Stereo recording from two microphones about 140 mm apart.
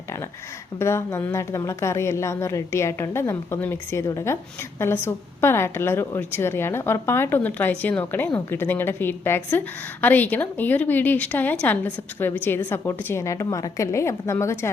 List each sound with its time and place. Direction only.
0.8 s a woman's voice: 20° left (ahead or behind)